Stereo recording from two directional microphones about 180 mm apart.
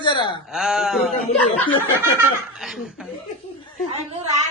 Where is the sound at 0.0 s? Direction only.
25° left (ahead or behind).